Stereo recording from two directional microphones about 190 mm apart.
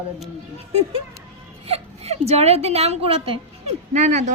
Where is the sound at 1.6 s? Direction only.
30° right (ahead or behind).